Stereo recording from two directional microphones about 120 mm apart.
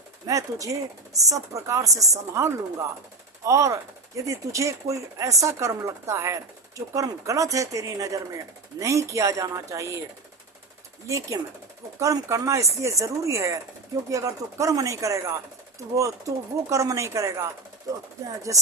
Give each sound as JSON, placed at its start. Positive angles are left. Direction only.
{"t": 0.3, "sound": "speech", "side_deg": -25}
{"t": 11.9, "sound": "speech", "side_deg": -25}